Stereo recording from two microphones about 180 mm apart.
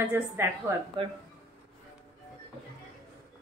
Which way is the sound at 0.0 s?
10° right (ahead or behind).